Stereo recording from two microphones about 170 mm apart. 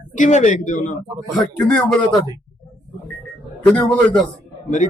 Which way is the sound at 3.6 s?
10° left (ahead or behind).